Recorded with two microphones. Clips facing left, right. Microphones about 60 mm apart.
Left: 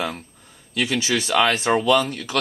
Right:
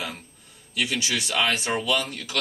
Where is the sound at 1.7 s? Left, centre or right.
Left.